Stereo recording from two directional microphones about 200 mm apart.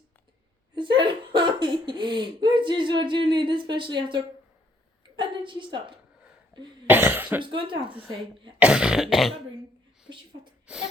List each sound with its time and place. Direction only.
0.8 s speech: 25° right (ahead or behind)
5.1 s a sound: 25° right (ahead or behind)
6.8 s cough: 10° right (ahead or behind)
7.4 s speech: 25° right (ahead or behind)
8.5 s cough: 5° right (ahead or behind)
10.7 s cough: 5° right (ahead or behind)